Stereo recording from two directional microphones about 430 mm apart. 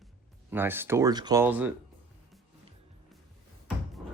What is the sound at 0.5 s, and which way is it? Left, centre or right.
Speech, centre.